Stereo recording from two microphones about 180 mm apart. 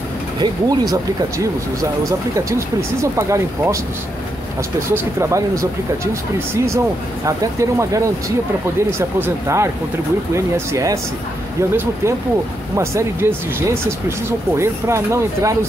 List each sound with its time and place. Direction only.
0.4 s speech: 20° right (ahead or behind)
4.9 s speech: 15° right (ahead or behind)